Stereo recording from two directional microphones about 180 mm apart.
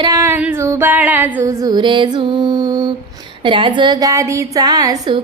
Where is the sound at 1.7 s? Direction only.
25° right (ahead or behind).